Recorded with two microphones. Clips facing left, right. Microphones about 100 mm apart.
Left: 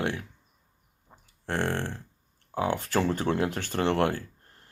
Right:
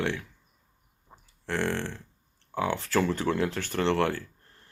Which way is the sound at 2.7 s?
20° left (ahead or behind).